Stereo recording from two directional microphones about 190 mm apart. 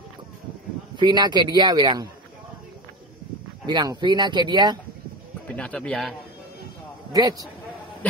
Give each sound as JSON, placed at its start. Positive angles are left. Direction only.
{"t": 0.9, "sound": "speech", "side_deg": -20}
{"t": 3.6, "sound": "speech", "side_deg": -20}
{"t": 5.5, "sound": "a man's voice", "side_deg": 5}
{"t": 7.1, "sound": "speech", "side_deg": -20}